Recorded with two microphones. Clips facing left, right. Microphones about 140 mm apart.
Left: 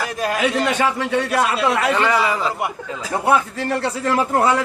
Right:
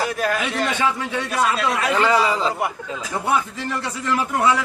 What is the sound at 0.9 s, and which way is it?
Speech, 65° left (ahead or behind).